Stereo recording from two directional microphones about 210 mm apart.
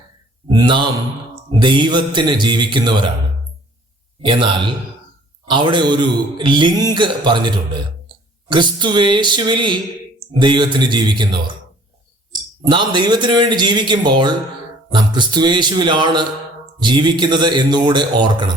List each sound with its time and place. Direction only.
0.4 s mantra: 20° right (ahead or behind)
1.5 s a man's voice: 20° right (ahead or behind)
4.2 s a man's voice: 25° right (ahead or behind)
12.6 s a man's voice: 20° right (ahead or behind)